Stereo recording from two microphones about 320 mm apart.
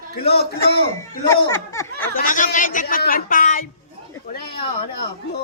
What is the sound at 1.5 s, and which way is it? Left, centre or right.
Speech, centre.